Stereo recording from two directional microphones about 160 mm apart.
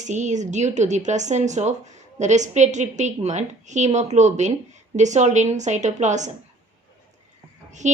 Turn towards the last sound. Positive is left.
turn(degrees=-50)  # may be behind; listen again after turning